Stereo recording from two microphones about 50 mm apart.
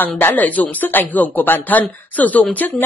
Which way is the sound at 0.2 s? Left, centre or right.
Left.